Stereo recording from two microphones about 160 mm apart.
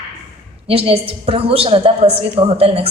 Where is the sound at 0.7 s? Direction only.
35° right (ahead or behind).